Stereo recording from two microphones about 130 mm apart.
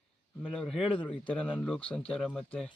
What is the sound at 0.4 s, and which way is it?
Speech, 5° left (ahead or behind).